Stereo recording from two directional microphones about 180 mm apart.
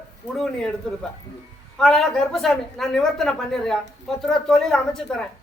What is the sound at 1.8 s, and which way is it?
A woman's voice, centre (ahead or behind).